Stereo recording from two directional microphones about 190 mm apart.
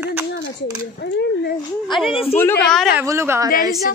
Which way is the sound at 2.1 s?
30° left (ahead or behind).